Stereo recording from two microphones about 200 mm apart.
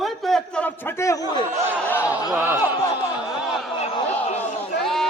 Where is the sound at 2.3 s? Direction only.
10° right (ahead or behind).